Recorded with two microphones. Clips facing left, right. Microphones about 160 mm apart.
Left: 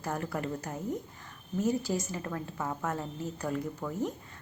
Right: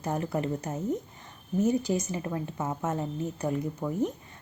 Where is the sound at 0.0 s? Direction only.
20° right (ahead or behind).